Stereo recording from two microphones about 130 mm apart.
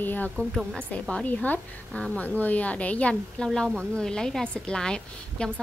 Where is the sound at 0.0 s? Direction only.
15° left (ahead or behind).